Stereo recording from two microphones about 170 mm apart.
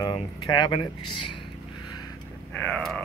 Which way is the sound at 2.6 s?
5° left (ahead or behind).